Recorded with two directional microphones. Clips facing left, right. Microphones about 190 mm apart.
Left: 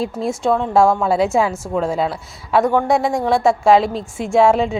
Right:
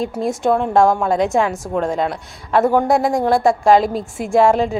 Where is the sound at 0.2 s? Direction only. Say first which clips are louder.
Right 2 dB; centre (ahead or behind).